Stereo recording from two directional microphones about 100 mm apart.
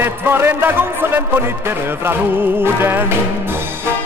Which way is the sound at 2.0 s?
20° right (ahead or behind).